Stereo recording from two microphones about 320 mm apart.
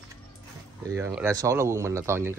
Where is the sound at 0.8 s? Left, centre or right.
Centre.